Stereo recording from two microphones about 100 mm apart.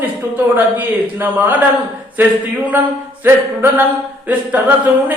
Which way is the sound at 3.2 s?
20° right (ahead or behind).